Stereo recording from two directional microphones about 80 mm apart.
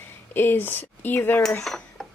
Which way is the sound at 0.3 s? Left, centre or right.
Left.